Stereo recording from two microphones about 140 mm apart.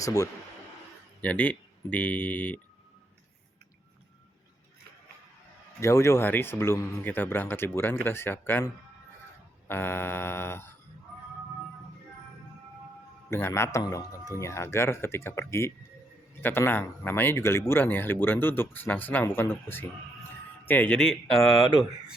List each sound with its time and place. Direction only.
0.0 s speech: 25° left (ahead or behind)
1.2 s speech: 10° left (ahead or behind)
5.8 s speech: 20° left (ahead or behind)
9.6 s speech: 15° left (ahead or behind)
13.3 s speech: 20° left (ahead or behind)